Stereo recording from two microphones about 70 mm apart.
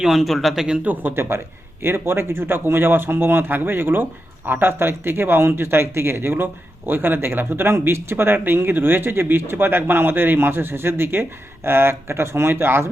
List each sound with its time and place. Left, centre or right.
0.0 s speech: centre
0.9 s speech: right